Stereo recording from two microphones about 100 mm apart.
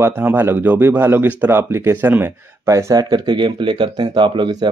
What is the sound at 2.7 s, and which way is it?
Speech, 40° right (ahead or behind).